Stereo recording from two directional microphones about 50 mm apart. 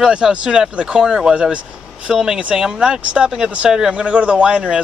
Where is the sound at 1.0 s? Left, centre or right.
Centre.